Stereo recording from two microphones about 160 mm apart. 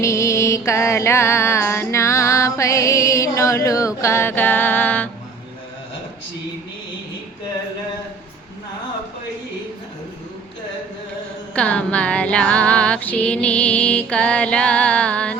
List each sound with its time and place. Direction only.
0.0 s music: 20° left (ahead or behind)
11.5 s music: 10° left (ahead or behind)